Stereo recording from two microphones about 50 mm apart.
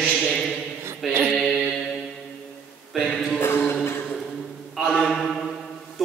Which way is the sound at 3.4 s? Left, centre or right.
Left.